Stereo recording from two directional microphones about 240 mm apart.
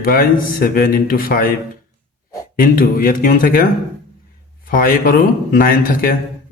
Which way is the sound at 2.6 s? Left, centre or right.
Left.